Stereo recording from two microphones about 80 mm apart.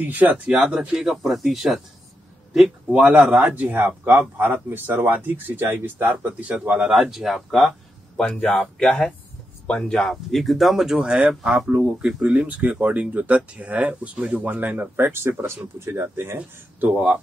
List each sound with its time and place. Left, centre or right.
0.0 s speech: right
7.0 s speech: centre
8.2 s speech: centre; by 16.3 s right
16.3 s speech: right